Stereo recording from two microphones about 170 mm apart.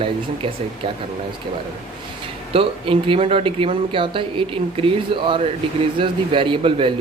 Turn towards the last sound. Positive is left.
turn(degrees=-30)  # may be behind; listen again after turning